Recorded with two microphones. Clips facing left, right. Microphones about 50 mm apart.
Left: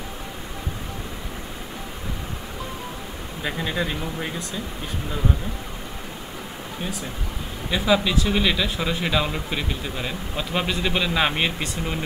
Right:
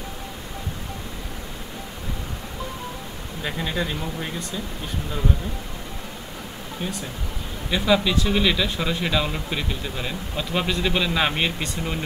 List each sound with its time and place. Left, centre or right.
3.4 s speech: centre
7.7 s speech: centre